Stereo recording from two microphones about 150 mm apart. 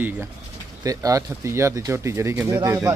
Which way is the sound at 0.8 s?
25° right (ahead or behind).